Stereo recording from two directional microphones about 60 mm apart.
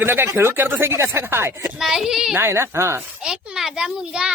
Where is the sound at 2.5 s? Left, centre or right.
Right.